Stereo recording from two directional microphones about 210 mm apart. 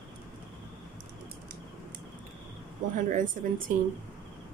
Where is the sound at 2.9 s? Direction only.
40° right (ahead or behind).